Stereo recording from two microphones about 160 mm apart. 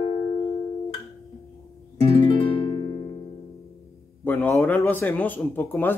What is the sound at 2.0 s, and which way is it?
Music, 35° left (ahead or behind).